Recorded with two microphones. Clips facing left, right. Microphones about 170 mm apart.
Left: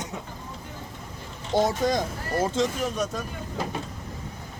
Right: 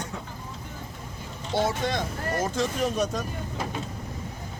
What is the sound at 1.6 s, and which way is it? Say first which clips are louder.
Speech: left 3 dB; 40° left (ahead or behind).